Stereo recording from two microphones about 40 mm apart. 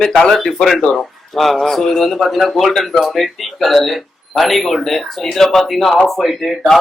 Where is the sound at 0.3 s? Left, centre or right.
Centre.